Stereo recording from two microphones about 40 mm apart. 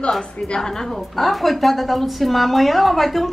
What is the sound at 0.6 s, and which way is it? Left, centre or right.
A woman's voice, centre.